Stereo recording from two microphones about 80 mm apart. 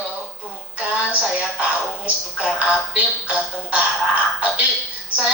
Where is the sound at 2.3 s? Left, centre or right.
Centre.